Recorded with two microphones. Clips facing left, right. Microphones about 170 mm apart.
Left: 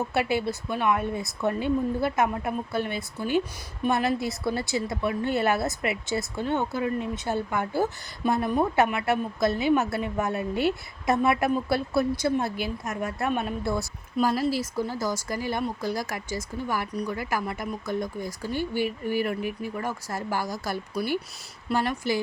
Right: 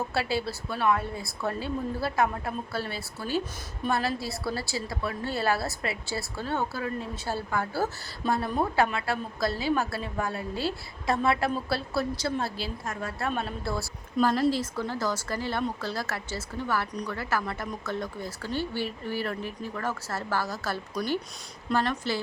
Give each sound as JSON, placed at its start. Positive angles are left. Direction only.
{"t": 0.1, "sound": "a woman's voice", "side_deg": 20}